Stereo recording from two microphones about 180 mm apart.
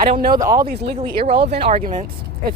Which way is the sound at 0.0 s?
55° right (ahead or behind).